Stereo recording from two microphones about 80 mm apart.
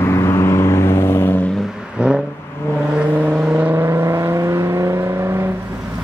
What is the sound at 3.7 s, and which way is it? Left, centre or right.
Vehicle, right.